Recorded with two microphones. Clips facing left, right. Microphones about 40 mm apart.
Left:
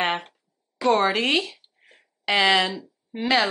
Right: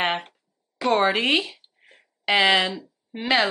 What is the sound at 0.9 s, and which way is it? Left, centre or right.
Speech, centre.